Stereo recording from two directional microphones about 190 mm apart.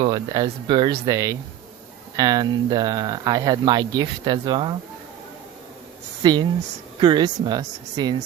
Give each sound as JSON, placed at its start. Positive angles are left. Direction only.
{"t": 0.0, "sound": "speech", "side_deg": -20}
{"t": 6.2, "sound": "speech", "side_deg": -20}